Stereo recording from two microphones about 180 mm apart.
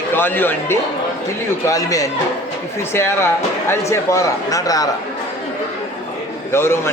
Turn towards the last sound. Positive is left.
turn(degrees=15)  # may be behind; listen again after turning